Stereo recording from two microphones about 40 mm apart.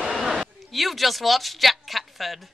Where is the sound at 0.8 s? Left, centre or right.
Centre.